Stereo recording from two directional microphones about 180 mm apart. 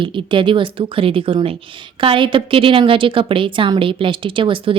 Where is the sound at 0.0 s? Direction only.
25° right (ahead or behind).